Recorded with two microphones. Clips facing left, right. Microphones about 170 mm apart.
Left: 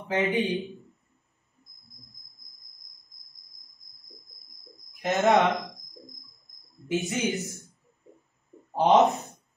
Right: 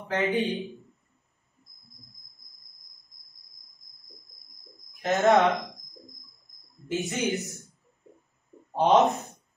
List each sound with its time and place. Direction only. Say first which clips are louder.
0.0 s a man's voice: left 1 dB; 20° left (ahead or behind)
5.0 s speech: right 1 dB; centre (ahead or behind)
6.7 s a sound: left 2 dB; centre (ahead or behind)
7.2 s speech: even; 65° right (ahead or behind)
8.8 s speech: left 1 dB; centre (ahead or behind)